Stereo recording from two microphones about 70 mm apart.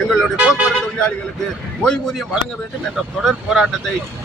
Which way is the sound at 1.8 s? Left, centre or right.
Centre.